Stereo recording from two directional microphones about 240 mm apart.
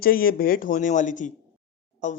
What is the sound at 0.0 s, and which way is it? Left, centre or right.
Speech, left.